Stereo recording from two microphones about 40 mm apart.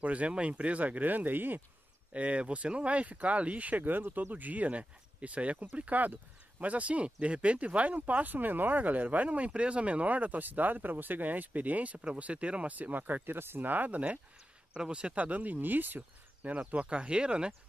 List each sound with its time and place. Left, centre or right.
0.0 s speech: right
2.1 s speech: right
9.5 s speech: right
12.7 s speech: right
13.7 s speech: right
14.8 s speech: right
15.1 s speech: right
16.4 s speech: right